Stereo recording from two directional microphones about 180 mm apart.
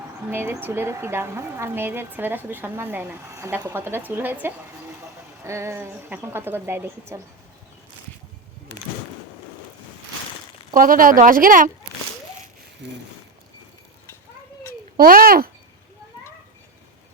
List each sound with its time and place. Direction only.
0.3 s speech: 10° right (ahead or behind)
10.8 s speech: 50° right (ahead or behind)
12.8 s speech: 80° right
14.9 s speech: 55° right (ahead or behind)